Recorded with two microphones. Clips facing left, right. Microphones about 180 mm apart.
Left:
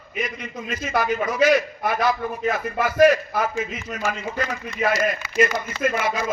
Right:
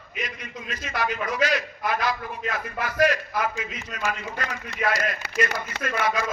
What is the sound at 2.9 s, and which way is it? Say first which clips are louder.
Speech: left 7 dB; 25° left (ahead or behind).